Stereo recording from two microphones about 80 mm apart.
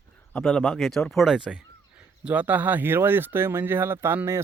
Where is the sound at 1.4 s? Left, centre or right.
Centre; by 4.2 s right.